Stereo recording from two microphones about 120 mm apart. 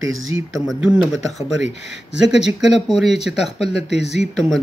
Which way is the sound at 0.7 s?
5° right (ahead or behind).